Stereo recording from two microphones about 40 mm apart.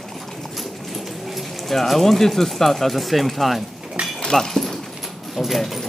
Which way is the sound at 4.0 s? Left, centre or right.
Right.